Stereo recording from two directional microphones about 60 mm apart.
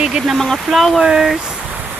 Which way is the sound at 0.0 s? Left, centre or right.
Centre.